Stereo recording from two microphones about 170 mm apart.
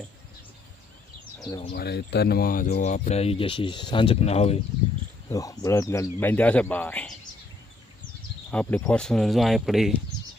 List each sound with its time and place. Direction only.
1.5 s speech: 25° left (ahead or behind)
1.7 s speech: 70° left (ahead or behind); by 4.6 s 35° left (ahead or behind)
5.3 s speech: 20° left (ahead or behind)
8.4 s speech: 5° left (ahead or behind)